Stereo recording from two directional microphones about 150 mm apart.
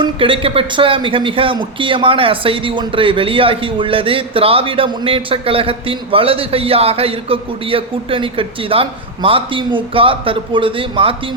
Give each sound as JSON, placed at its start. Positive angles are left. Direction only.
{"t": 0.0, "sound": "a man's voice", "side_deg": -35}